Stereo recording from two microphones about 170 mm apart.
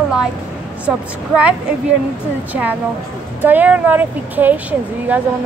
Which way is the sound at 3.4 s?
10° right (ahead or behind).